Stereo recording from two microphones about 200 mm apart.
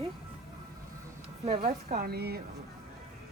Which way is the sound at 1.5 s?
45° right (ahead or behind).